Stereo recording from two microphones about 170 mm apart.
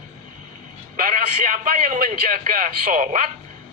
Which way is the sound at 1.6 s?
50° right (ahead or behind).